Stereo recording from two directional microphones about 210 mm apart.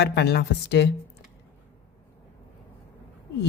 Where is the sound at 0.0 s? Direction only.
55° left (ahead or behind).